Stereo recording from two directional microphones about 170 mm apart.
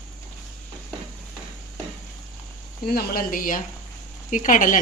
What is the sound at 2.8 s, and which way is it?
A woman's voice, 60° left (ahead or behind).